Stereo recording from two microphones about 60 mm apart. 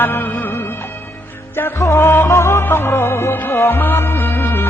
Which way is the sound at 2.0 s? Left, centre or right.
Left.